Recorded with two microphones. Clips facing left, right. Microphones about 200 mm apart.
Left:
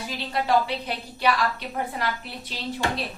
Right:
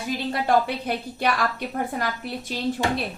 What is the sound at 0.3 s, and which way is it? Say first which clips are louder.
A woman's voice: right 1 dB; 50° right (ahead or behind).